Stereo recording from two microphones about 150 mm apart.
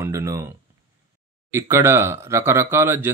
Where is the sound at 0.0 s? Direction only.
20° right (ahead or behind).